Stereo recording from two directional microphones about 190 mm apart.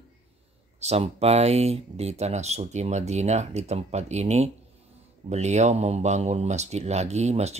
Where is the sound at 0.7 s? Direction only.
35° right (ahead or behind).